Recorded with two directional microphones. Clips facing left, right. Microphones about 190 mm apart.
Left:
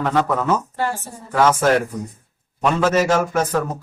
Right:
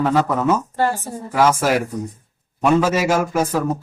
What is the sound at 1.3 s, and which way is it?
A man's voice, 10° right (ahead or behind).